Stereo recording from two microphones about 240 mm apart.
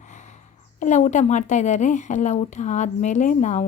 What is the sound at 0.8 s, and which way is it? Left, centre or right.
Speech, left.